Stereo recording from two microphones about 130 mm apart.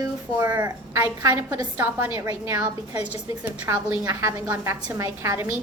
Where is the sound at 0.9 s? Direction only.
30° right (ahead or behind).